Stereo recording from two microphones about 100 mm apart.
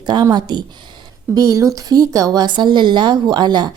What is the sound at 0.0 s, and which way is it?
Speech, 45° right (ahead or behind).